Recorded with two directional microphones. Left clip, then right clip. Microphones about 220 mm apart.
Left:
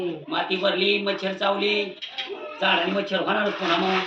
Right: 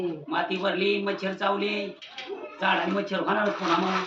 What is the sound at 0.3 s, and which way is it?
Speech, 25° right (ahead or behind).